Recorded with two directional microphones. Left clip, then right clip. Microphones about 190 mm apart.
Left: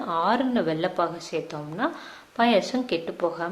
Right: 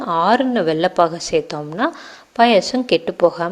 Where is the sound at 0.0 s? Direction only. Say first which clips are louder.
Right 8 dB; 30° right (ahead or behind).